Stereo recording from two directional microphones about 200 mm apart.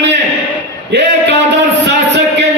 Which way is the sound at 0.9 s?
60° right (ahead or behind).